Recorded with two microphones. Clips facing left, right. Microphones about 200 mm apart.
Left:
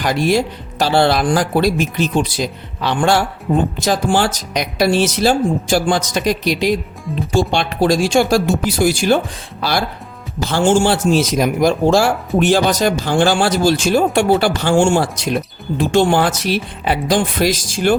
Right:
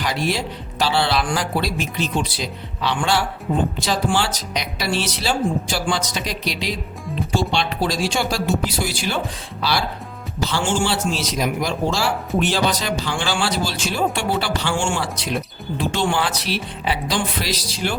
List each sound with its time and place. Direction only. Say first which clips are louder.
0.0 s speech: left 7 dB; 45° left (ahead or behind)